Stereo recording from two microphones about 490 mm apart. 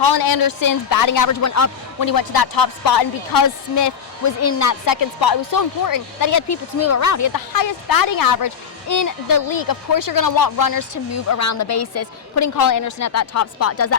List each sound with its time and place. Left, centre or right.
0.0 s speech: left